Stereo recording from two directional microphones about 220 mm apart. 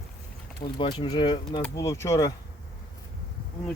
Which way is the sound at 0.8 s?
25° left (ahead or behind).